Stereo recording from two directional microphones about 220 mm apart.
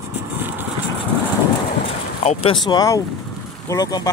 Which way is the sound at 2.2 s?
20° left (ahead or behind).